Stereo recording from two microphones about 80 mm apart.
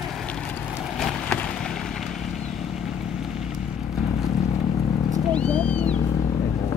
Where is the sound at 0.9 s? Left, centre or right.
Centre.